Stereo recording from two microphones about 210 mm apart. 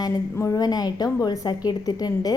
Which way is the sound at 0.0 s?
15° left (ahead or behind).